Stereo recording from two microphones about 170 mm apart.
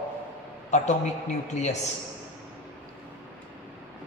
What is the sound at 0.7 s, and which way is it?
A woman's voice, 45° left (ahead or behind).